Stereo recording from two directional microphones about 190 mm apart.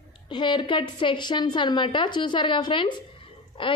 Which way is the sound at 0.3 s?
25° left (ahead or behind).